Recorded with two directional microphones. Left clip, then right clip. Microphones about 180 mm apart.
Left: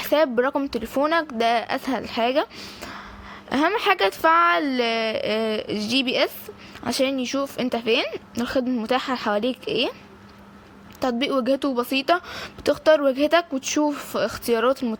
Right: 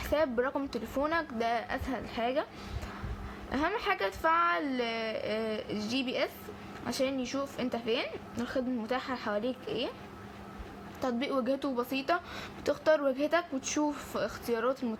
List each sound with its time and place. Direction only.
0.0 s speech: 50° left (ahead or behind)
11.0 s speech: 45° left (ahead or behind)